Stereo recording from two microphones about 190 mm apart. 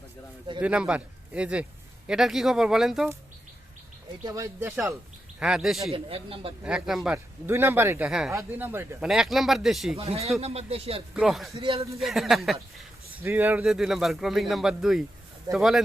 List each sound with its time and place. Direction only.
0.6 s speech: 5° right (ahead or behind)
4.2 s speech: 20° right (ahead or behind); by 5.9 s centre (ahead or behind)
5.9 s a man's voice: 30° right (ahead or behind)
6.7 s speech: 5° right (ahead or behind)
10.0 s speech: 30° right (ahead or behind)
11.1 s speech: 5° right (ahead or behind)
11.5 s a man's voice: 30° right (ahead or behind)
11.9 s speech: centre (ahead or behind)